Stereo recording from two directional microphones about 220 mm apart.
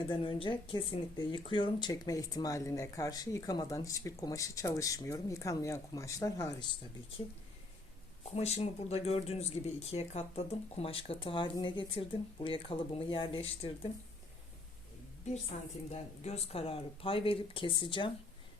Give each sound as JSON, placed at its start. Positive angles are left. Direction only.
{"t": 0.1, "sound": "speech", "side_deg": 25}
{"t": 8.2, "sound": "speech", "side_deg": 30}
{"t": 15.5, "sound": "a woman's voice", "side_deg": 35}